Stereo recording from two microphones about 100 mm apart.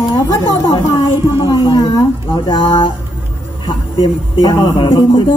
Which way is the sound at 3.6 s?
50° left (ahead or behind).